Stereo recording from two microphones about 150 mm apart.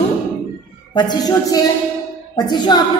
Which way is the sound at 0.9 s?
25° left (ahead or behind).